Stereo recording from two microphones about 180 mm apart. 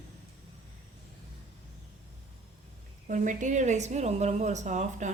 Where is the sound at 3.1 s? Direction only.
45° right (ahead or behind).